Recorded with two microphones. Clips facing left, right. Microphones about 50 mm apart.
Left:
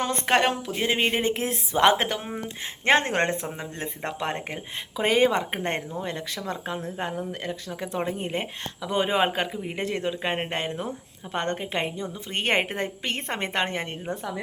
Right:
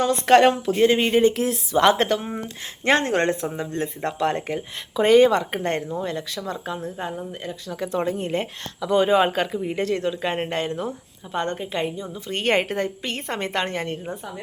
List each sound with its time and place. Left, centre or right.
0.4 s speech: centre; by 2.0 s left
2.0 s speech: centre
2.8 s speech: left
3.5 s speech: centre; by 7.1 s left
7.7 s speech: centre
11.3 s speech: left
12.3 s speech: left